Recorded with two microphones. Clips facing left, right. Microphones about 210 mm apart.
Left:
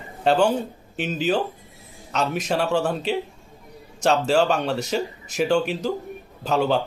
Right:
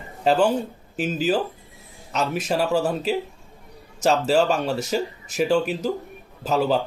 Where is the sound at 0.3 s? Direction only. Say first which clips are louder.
Even; 5° right (ahead or behind).